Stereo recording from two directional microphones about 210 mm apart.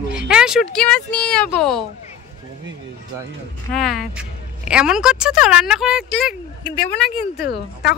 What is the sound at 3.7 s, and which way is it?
A woman's voice, centre (ahead or behind).